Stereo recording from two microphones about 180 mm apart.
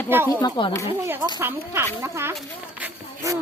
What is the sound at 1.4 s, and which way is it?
Speech, 10° right (ahead or behind).